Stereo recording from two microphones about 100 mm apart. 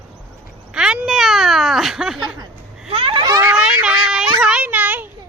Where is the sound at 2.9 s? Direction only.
65° right (ahead or behind).